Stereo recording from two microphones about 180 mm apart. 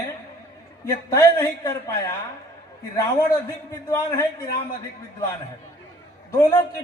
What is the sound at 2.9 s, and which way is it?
A man's voice, 20° left (ahead or behind).